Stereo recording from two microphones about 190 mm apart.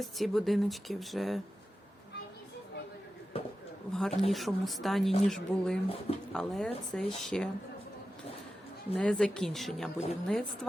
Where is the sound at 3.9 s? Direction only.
Centre (ahead or behind).